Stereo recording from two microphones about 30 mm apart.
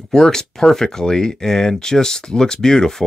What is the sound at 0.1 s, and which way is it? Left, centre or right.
Speech, centre.